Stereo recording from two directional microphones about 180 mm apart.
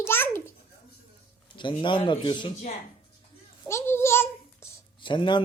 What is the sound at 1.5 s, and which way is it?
Speech, 25° left (ahead or behind).